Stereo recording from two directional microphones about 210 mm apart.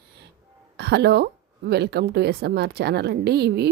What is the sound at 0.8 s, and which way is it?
A woman's voice, 50° right (ahead or behind).